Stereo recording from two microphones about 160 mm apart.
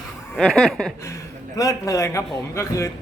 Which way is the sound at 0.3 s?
5° left (ahead or behind).